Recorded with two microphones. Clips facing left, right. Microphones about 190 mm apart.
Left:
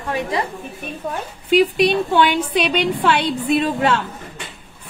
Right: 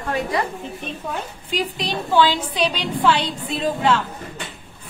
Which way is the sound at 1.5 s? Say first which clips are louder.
Left 11 dB; 65° left (ahead or behind).